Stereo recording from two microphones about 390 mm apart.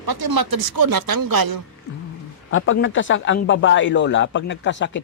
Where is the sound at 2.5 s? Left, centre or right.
Left.